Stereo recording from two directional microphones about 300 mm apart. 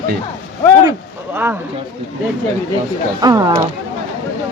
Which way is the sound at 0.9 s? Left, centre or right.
Centre.